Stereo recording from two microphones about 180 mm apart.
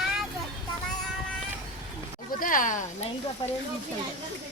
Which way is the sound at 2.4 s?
45° left (ahead or behind).